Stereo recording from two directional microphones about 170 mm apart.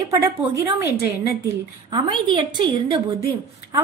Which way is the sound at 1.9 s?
30° right (ahead or behind).